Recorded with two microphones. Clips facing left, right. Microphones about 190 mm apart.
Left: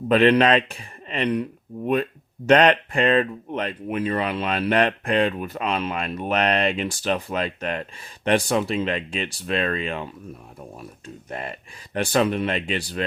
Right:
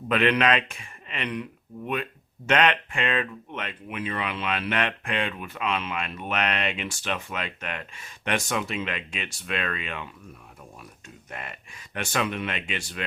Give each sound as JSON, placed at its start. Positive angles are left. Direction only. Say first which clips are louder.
{"t": 0.1, "sound": "speech", "louder": "left 6 dB", "side_deg": 35}